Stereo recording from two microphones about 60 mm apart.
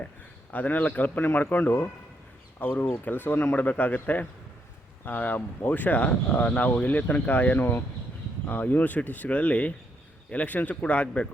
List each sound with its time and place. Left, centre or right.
0.5 s speech: left